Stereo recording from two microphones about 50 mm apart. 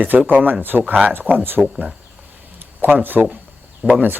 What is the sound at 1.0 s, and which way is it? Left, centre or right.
Speech, right.